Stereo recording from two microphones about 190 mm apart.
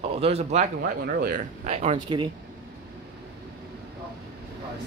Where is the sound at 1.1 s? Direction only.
45° right (ahead or behind); by 2.3 s 25° right (ahead or behind).